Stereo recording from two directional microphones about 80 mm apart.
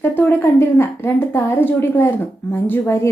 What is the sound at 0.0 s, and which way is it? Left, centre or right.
A woman's voice, left.